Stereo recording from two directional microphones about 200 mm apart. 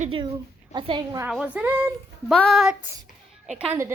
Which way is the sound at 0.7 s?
25° right (ahead or behind).